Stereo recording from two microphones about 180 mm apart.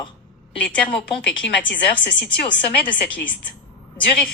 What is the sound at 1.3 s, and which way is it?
Speech, 80° left.